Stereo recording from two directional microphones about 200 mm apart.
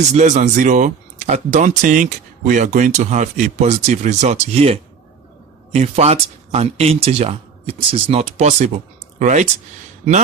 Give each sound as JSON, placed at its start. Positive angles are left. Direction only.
{"t": 0.1, "sound": "a man's voice", "side_deg": -35}